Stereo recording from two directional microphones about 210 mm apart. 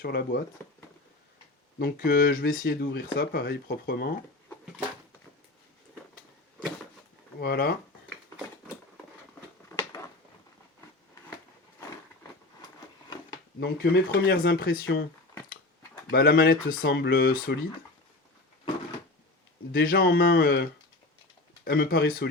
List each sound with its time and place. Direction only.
0.0 s speech: 50° left (ahead or behind)
2.0 s speech: 45° left (ahead or behind)
7.3 s speech: 50° left (ahead or behind)
9.6 s a sound: 15° left (ahead or behind)
13.6 s speech: 50° left (ahead or behind)
16.0 s speech: 45° left (ahead or behind)
19.7 s speech: 45° left (ahead or behind)